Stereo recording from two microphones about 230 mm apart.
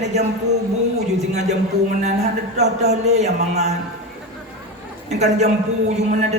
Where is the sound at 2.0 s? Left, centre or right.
Right.